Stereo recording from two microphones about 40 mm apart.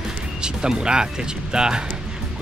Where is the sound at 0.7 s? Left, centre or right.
Centre.